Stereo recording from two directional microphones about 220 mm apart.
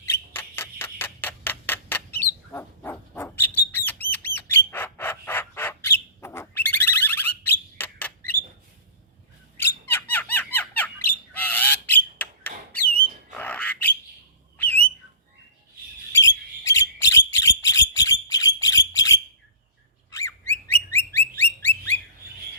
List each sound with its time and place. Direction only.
0.1 s a sound: 10° left (ahead or behind)
2.5 s bird: 10° left (ahead or behind)
9.6 s squawk: 10° left (ahead or behind)
13.3 s bird: 5° left (ahead or behind)
16.1 s bird: 15° left (ahead or behind)